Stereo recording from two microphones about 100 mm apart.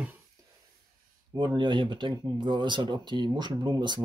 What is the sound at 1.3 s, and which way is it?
Speech, 50° right (ahead or behind).